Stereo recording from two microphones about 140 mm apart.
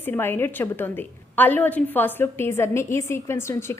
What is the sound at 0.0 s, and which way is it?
A woman's voice, 15° left (ahead or behind).